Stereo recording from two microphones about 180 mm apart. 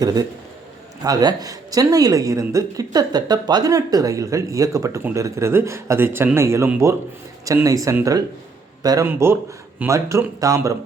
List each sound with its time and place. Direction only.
0.0 s a woman's voice: 20° right (ahead or behind)